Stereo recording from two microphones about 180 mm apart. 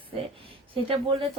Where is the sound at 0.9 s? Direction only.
30° right (ahead or behind).